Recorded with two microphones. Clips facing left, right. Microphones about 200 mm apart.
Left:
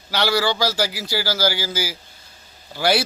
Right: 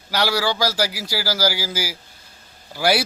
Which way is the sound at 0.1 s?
10° right (ahead or behind).